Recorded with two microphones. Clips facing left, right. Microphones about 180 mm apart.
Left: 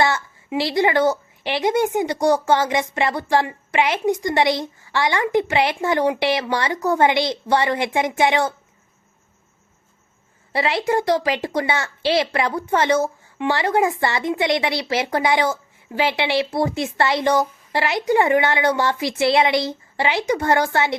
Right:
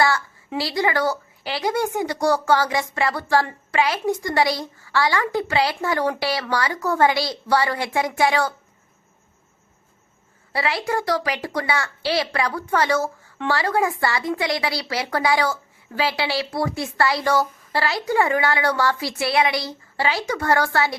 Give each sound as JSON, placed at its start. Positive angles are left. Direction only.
{"t": 0.0, "sound": "a woman's voice", "side_deg": 20}
{"t": 10.5, "sound": "a woman's voice", "side_deg": 25}